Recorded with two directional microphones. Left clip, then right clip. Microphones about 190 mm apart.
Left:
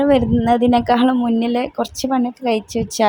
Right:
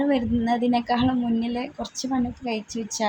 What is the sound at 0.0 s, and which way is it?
A woman's voice, 35° left (ahead or behind).